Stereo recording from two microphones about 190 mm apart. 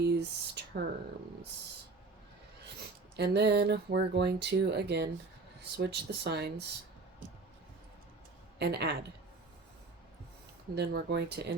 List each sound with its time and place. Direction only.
0.0 s a sound: 60° right (ahead or behind)
3.2 s speech: 60° right (ahead or behind)
8.5 s speech: 60° right (ahead or behind)
10.8 s speech: 60° right (ahead or behind)